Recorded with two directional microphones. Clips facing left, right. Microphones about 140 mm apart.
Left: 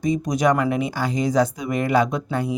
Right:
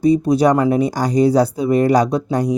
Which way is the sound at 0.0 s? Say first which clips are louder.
Right 7 dB; 35° right (ahead or behind).